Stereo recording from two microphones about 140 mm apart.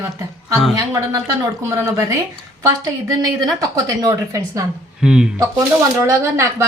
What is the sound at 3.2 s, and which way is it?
Speech, 25° right (ahead or behind).